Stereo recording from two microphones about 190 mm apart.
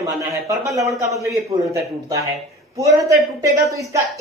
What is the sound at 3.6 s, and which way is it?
Speech, 15° right (ahead or behind).